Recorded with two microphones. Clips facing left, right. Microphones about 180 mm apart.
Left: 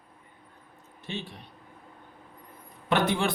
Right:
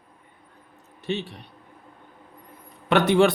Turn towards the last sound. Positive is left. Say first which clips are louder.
# right 8 dB
turn(degrees=-70)  # may be behind; listen again after turning